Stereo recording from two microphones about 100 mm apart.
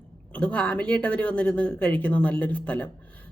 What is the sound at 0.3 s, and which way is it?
Speech, 10° left (ahead or behind).